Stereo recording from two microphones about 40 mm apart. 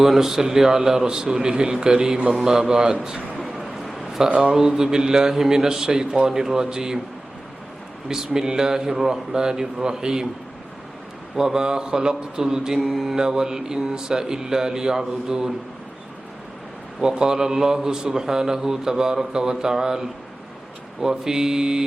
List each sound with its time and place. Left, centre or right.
0.0 s mantra: centre
3.4 s a sound: centre
4.2 s mantra: centre
8.0 s mantra: centre
11.3 s mantra: centre
17.0 s mantra: centre